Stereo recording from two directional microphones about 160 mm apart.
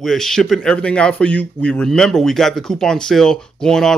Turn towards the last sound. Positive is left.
turn(degrees=5)  # may be behind; listen again after turning